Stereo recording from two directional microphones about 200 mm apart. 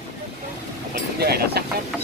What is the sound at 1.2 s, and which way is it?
Speech, 50° right (ahead or behind).